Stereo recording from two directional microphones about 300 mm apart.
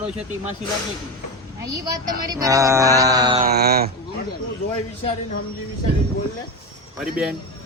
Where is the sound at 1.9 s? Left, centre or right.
Centre.